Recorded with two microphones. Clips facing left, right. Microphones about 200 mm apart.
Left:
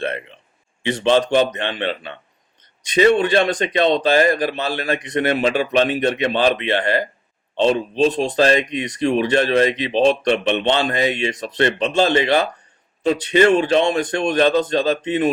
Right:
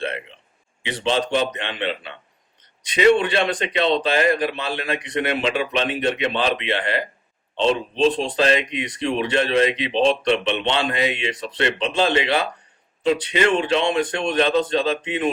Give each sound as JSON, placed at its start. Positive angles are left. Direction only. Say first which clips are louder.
{"t": 0.9, "sound": "speech", "louder": "left 5 dB", "side_deg": 45}